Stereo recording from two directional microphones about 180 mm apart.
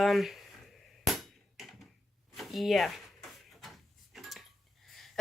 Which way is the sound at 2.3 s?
Centre (ahead or behind).